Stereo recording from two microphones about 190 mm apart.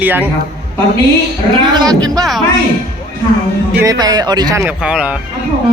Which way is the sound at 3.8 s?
20° right (ahead or behind).